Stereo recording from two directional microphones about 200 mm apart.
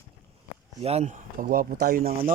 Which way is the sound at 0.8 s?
30° right (ahead or behind).